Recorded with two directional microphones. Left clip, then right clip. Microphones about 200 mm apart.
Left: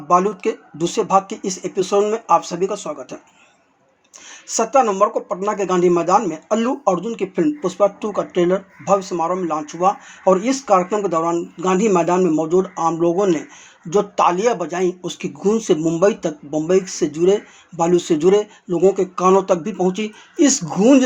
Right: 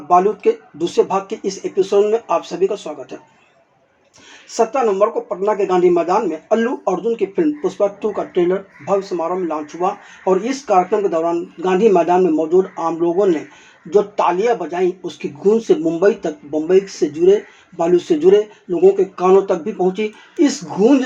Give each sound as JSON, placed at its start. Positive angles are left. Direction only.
{"t": 0.1, "sound": "speech", "side_deg": 20}
{"t": 4.4, "sound": "speech", "side_deg": 25}